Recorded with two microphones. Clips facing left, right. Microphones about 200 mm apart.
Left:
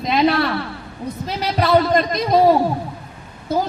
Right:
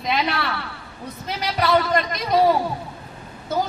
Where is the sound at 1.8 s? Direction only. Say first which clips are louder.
Left 5 dB; 35° left (ahead or behind).